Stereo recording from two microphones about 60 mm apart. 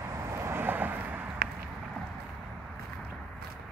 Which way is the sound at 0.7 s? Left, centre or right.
Right.